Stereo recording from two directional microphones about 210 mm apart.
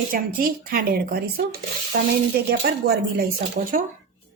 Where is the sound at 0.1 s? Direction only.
45° right (ahead or behind).